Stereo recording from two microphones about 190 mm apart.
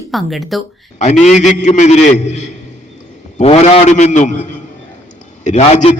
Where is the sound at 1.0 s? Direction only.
35° left (ahead or behind).